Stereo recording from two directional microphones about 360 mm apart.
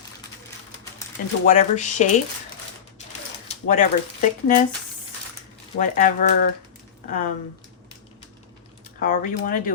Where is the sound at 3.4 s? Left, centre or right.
Left.